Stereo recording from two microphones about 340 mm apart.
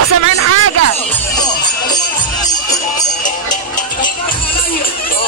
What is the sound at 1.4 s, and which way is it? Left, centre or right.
Music, centre.